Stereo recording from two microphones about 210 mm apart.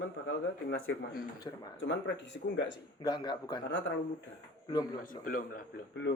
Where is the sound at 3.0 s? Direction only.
20° left (ahead or behind).